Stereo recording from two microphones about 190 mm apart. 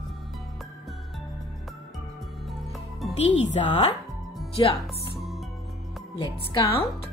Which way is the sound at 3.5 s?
35° left (ahead or behind).